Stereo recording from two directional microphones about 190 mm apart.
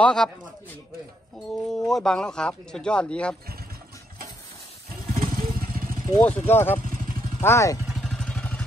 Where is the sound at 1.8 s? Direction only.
Centre (ahead or behind).